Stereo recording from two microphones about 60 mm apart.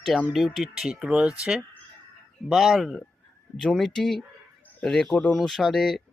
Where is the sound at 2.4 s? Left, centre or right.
Centre.